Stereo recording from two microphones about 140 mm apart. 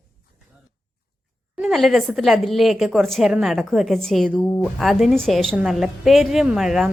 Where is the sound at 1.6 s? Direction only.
Centre (ahead or behind).